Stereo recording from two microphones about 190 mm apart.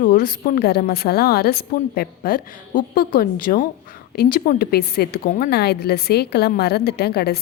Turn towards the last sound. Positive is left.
turn(degrees=55)  # may be behind; listen again after turning